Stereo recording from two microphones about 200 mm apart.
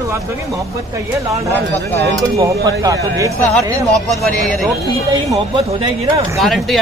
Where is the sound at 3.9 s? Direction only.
Centre (ahead or behind).